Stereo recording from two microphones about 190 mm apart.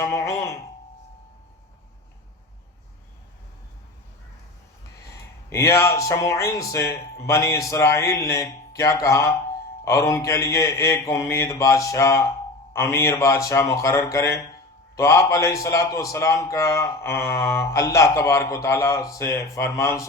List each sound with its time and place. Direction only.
0.0 s speech: 15° left (ahead or behind)
5.5 s a man's voice: 15° left (ahead or behind)